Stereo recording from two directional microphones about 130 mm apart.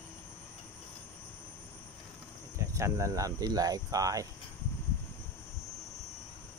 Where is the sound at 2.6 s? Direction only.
25° right (ahead or behind).